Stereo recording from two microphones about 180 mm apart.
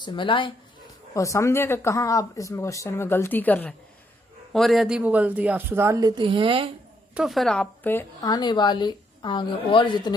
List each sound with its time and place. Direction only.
0.0 s a woman's voice: 25° left (ahead or behind)
1.1 s speech: 15° left (ahead or behind); by 6.7 s 30° right (ahead or behind)
7.1 s a woman's voice: 5° right (ahead or behind)
8.3 s a woman's voice: 25° left (ahead or behind)